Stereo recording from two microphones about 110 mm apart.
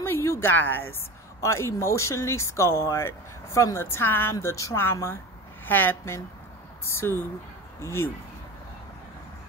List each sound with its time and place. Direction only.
0.0 s a woman's voice: 25° left (ahead or behind)